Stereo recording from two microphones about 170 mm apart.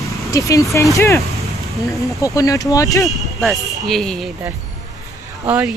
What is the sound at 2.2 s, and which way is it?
Speech, 20° left (ahead or behind).